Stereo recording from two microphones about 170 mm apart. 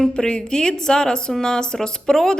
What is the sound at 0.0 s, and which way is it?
A woman's voice, 5° left (ahead or behind).